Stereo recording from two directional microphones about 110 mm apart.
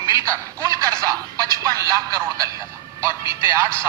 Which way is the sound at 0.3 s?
30° right (ahead or behind).